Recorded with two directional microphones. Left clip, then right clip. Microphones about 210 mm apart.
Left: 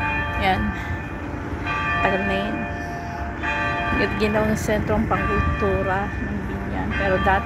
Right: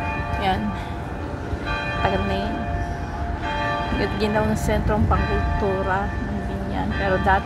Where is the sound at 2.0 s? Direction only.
5° left (ahead or behind).